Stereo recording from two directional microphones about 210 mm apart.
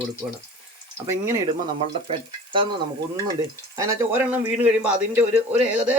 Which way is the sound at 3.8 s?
10° right (ahead or behind).